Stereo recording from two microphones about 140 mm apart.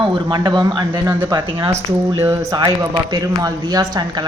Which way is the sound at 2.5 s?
30° right (ahead or behind).